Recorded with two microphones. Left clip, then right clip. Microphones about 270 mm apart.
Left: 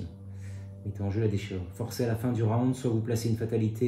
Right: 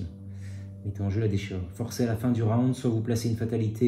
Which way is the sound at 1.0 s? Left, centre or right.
Right.